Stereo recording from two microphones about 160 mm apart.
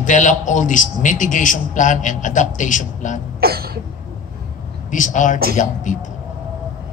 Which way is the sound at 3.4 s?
75° right (ahead or behind).